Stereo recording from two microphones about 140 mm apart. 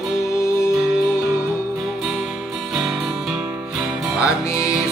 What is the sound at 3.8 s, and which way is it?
Music, 5° right (ahead or behind).